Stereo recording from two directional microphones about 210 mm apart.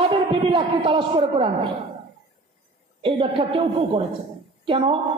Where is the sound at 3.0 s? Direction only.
25° right (ahead or behind).